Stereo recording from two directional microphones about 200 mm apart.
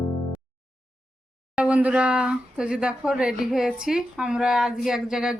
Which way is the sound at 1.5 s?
5° right (ahead or behind).